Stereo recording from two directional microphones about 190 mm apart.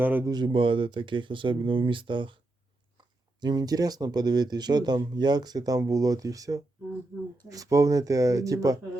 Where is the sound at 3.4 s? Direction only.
20° right (ahead or behind).